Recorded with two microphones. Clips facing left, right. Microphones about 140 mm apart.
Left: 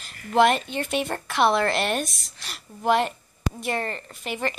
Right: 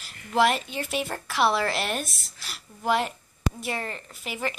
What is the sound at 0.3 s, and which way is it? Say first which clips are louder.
Speech: left 3 dB; 5° right (ahead or behind).